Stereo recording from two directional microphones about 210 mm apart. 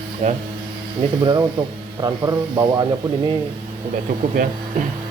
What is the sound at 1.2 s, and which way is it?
Speech, 20° right (ahead or behind).